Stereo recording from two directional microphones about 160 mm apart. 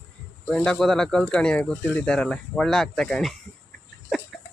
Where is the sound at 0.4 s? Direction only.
5° left (ahead or behind).